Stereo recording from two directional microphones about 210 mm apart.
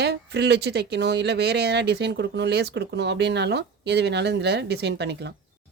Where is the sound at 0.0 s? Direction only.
55° right (ahead or behind).